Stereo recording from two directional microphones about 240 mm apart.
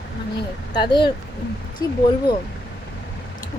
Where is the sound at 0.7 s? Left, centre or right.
Centre.